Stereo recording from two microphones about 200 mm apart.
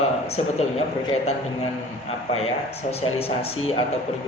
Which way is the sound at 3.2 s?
30° left (ahead or behind).